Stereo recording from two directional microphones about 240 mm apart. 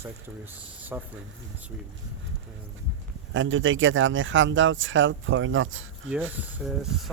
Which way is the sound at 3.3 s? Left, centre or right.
Right.